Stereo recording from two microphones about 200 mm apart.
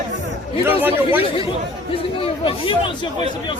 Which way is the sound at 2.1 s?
25° left (ahead or behind).